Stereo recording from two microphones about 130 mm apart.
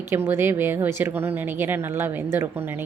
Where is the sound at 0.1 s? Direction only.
20° right (ahead or behind).